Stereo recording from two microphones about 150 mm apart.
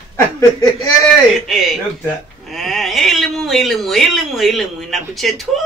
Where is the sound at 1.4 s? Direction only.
Centre (ahead or behind).